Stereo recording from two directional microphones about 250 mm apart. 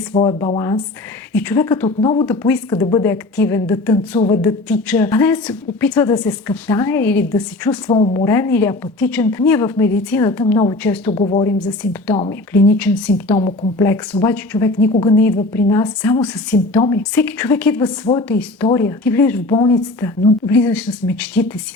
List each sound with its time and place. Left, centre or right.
0.1 s speech: centre
1.3 s a woman's voice: centre
2.2 s a woman's voice: centre
7.9 s a woman's voice: centre
11.4 s a woman's voice: centre
18.3 s a woman's voice: centre